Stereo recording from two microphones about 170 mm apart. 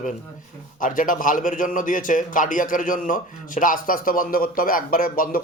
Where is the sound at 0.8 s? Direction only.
50° left (ahead or behind).